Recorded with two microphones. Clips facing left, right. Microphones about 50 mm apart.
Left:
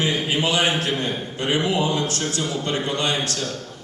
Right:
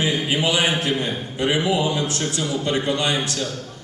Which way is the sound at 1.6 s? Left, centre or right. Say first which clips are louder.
Right 1 dB; left.